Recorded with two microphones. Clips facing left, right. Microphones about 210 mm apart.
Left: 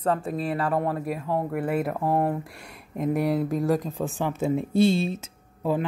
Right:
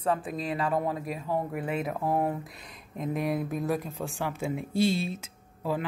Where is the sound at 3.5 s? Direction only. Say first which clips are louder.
Left 5 dB; 90° left.